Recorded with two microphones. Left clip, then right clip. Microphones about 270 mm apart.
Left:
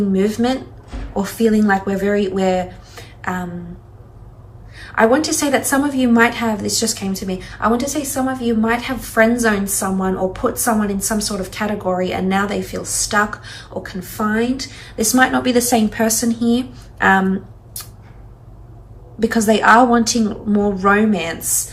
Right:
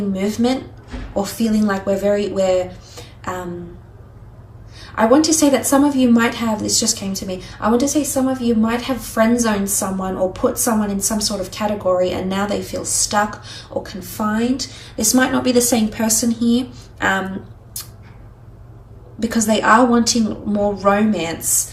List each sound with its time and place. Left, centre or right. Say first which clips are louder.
0.1 s a woman's voice: right 1 dB; centre
4.8 s a woman's voice: even; centre
19.2 s a woman's voice: left 3 dB; right